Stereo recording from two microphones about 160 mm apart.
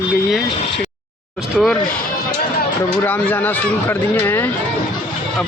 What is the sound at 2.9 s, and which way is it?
Speech, 10° left (ahead or behind).